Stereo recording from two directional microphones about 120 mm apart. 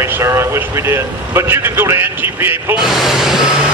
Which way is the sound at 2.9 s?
Centre (ahead or behind).